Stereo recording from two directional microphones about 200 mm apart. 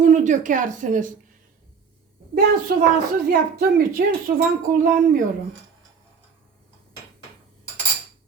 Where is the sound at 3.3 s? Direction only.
45° right (ahead or behind).